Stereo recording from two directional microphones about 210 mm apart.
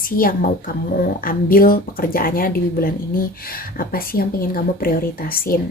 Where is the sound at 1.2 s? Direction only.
45° left (ahead or behind).